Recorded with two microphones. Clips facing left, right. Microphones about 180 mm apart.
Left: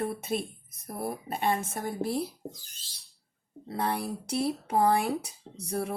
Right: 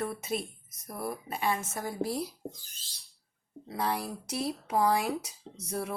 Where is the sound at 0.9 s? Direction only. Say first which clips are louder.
Left 2 dB; 25° left (ahead or behind).